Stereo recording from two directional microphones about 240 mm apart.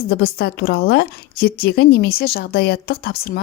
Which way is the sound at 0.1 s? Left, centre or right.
Left.